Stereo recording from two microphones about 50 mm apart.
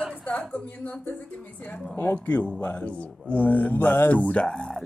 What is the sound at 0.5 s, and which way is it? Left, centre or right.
Speech, left.